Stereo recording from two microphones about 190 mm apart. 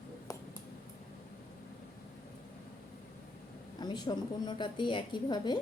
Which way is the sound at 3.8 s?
20° left (ahead or behind).